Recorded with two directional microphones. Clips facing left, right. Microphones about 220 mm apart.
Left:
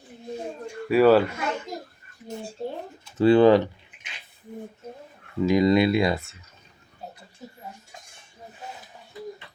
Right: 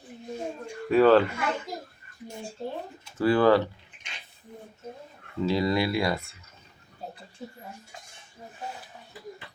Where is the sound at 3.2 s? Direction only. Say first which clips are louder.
Left 5 dB; 25° left (ahead or behind).